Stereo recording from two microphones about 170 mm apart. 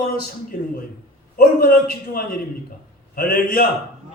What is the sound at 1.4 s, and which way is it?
A man's voice, 60° left (ahead or behind).